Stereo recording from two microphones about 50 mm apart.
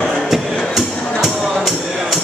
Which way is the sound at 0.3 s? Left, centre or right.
Centre.